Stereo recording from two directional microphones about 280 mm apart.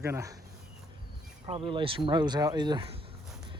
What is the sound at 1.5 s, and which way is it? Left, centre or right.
Speech, centre.